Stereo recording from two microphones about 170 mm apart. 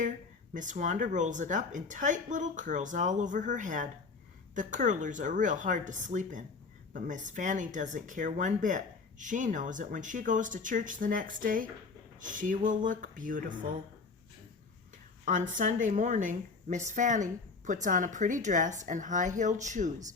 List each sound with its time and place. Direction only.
0.5 s speech: 50° right (ahead or behind)
15.2 s speech: 50° right (ahead or behind)